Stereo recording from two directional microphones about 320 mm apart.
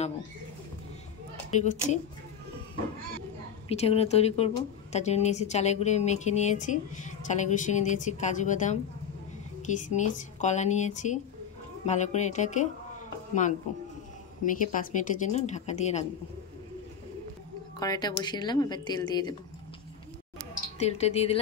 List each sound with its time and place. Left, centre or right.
1.5 s a woman's voice: left
3.6 s speech: centre
17.7 s a woman's voice: centre
20.8 s speech: centre